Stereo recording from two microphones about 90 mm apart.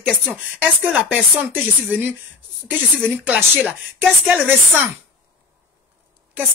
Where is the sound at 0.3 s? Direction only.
15° right (ahead or behind).